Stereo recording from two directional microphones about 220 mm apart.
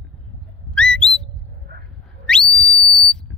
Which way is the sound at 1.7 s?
50° right (ahead or behind).